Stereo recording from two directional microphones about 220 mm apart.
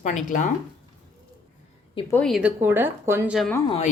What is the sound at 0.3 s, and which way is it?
Speech, 35° left (ahead or behind).